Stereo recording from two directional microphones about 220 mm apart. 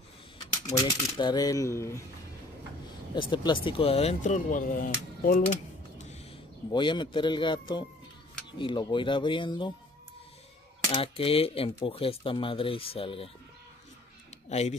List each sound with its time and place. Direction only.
0.7 s coin: 20° left (ahead or behind)
3.2 s speech: 20° left (ahead or behind); by 5.6 s 40° left (ahead or behind)
6.7 s speech: 20° left (ahead or behind)
10.9 s speech: 25° left (ahead or behind)
14.5 s speech: 30° left (ahead or behind)